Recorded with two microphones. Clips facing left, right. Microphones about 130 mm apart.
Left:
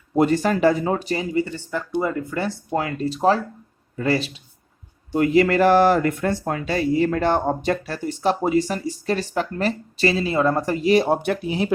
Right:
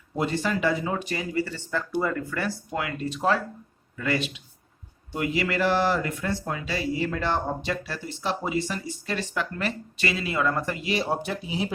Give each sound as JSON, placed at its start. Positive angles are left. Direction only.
{"t": 0.2, "sound": "speech", "side_deg": 45}
{"t": 2.7, "sound": "speech", "side_deg": 35}